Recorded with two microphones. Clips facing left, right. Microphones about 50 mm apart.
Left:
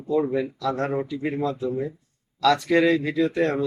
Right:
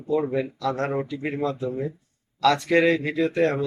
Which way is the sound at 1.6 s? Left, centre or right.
Centre.